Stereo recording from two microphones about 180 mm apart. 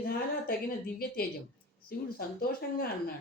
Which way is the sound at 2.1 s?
55° left (ahead or behind).